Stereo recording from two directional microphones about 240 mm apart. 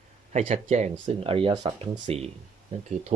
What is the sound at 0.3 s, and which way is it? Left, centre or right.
Speech, right.